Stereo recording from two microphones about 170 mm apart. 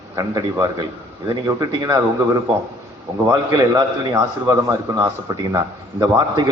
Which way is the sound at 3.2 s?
20° right (ahead or behind).